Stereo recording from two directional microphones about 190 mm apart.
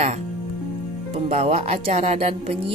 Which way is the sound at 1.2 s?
35° right (ahead or behind).